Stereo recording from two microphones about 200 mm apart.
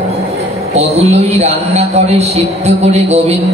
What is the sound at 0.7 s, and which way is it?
A man's voice, 30° right (ahead or behind).